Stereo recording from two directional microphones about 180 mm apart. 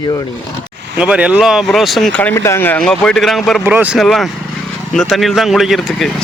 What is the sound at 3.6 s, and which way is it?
Speech, 10° right (ahead or behind).